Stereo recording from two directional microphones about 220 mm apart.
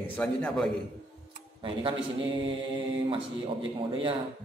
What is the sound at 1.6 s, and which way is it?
Speech, 25° right (ahead or behind).